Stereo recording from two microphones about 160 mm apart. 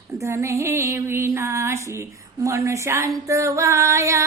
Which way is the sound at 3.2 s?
20° right (ahead or behind).